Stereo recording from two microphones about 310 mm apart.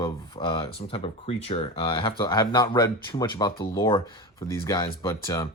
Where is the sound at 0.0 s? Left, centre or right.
Centre.